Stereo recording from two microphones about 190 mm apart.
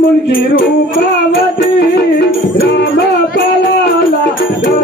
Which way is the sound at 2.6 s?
55° left (ahead or behind).